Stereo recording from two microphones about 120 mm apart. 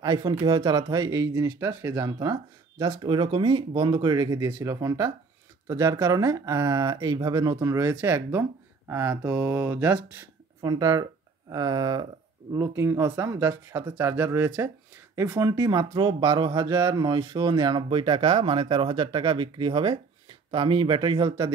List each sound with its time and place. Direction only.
0.0 s speech: 30° right (ahead or behind)
2.8 s speech: 40° right (ahead or behind); by 10.2 s 15° right (ahead or behind)
10.6 s speech: 30° right (ahead or behind)